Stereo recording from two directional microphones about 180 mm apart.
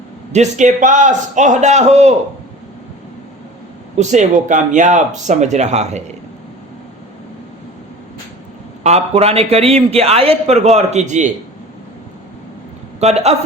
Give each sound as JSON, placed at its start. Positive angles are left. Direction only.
{"t": 0.3, "sound": "a man's voice", "side_deg": -40}
{"t": 3.9, "sound": "a man's voice", "side_deg": -40}
{"t": 8.8, "sound": "a man's voice", "side_deg": -35}
{"t": 13.0, "sound": "a man's voice", "side_deg": -35}